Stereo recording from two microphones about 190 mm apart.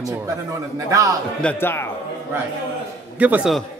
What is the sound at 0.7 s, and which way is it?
Speech, 15° right (ahead or behind).